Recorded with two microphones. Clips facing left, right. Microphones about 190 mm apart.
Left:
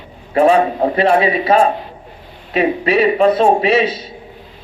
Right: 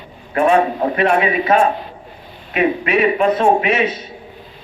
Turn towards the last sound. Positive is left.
turn(degrees=35)  # may be behind; listen again after turning